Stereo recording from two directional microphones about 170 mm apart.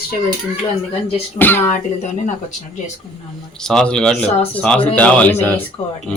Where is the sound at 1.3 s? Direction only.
10° left (ahead or behind).